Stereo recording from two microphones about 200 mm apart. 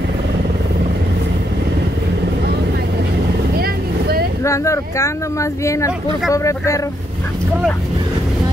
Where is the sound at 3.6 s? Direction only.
50° right (ahead or behind).